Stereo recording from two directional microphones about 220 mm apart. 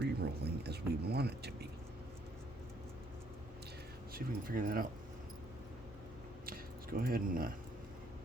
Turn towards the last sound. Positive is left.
turn(degrees=-40)  # may be behind; listen again after turning